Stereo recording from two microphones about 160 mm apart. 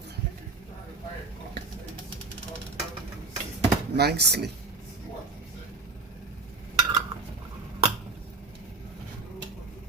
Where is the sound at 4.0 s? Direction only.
90° right.